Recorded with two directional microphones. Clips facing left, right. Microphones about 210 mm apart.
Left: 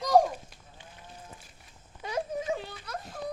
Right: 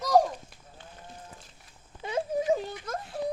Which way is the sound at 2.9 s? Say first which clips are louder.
Right 2 dB; 45° right (ahead or behind).